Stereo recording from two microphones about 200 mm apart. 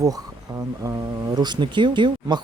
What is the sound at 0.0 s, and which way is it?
Speech, 20° right (ahead or behind).